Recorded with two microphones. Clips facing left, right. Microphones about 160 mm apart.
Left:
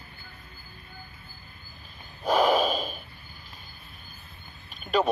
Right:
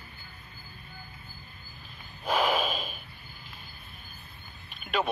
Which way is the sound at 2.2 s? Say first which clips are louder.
Left 5 dB; 40° left (ahead or behind).